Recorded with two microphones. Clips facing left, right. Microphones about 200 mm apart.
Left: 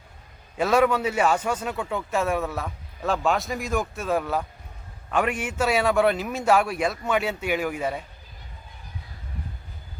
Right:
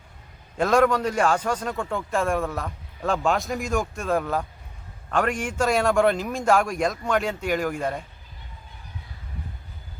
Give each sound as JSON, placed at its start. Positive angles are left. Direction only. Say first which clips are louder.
{"t": 0.5, "sound": "a man's voice", "louder": "right 1 dB", "side_deg": 5}